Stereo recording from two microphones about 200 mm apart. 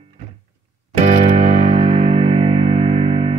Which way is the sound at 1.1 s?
35° right (ahead or behind).